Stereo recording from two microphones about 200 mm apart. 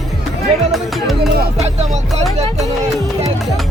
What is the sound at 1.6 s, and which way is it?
Music, 35° right (ahead or behind).